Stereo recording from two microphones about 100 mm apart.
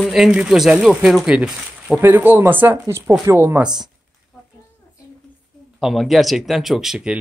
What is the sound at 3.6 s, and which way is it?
Speech, 5° right (ahead or behind).